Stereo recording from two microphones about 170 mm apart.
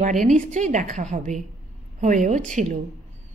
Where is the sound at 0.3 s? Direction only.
45° right (ahead or behind).